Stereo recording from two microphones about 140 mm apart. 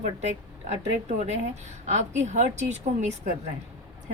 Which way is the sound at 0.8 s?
55° right (ahead or behind).